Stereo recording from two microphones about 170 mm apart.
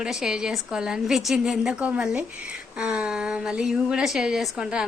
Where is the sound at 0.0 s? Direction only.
5° right (ahead or behind).